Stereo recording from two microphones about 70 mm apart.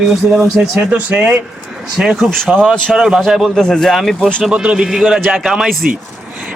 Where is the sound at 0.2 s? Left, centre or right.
Right.